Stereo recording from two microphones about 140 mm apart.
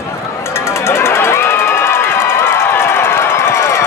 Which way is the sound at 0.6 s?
20° left (ahead or behind).